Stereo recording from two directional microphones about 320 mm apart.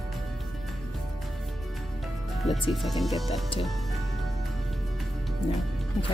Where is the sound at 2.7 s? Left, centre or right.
Centre.